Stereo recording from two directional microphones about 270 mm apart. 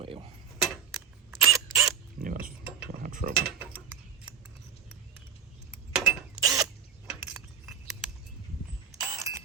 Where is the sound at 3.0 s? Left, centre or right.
Right.